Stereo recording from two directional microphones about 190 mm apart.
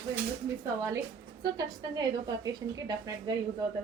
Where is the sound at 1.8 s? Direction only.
20° right (ahead or behind).